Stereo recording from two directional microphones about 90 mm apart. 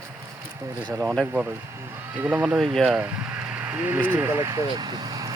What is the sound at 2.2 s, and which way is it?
Speech, 20° right (ahead or behind).